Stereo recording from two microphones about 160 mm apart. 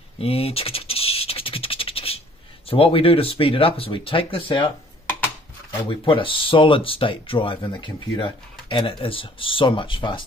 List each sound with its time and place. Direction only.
0.2 s scratch: 40° left (ahead or behind)
2.7 s speech: 35° left (ahead or behind)
5.9 s speech: 30° left (ahead or behind)